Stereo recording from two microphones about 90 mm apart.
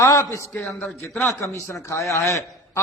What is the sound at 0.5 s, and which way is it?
Speech, 15° left (ahead or behind).